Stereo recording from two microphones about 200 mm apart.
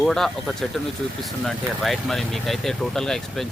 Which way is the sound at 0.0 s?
Centre (ahead or behind).